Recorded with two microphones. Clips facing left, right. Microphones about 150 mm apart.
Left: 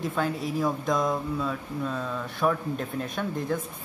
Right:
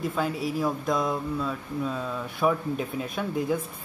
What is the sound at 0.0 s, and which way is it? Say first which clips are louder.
Speech: even; 5° right (ahead or behind).